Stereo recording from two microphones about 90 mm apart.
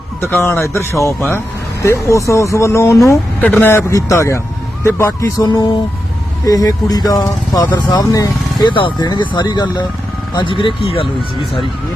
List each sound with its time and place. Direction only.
0.4 s speech: 30° left (ahead or behind)
3.4 s speech: 20° left (ahead or behind)
5.5 s speech: 45° left (ahead or behind)
7.8 s speech: 55° left (ahead or behind)
8.0 s speech: 40° left (ahead or behind)
8.7 s speech: 60° left (ahead or behind)
10.4 s speech: 70° left (ahead or behind)